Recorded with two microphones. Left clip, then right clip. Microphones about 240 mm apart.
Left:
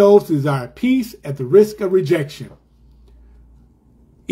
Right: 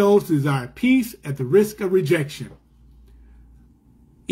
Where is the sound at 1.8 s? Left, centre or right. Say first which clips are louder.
Left 3 dB; right.